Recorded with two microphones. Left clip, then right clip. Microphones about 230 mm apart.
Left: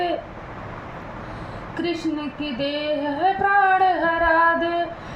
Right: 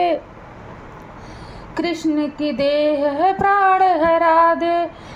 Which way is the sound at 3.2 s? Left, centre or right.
Right.